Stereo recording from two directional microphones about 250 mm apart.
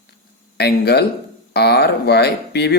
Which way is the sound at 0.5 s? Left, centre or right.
Left.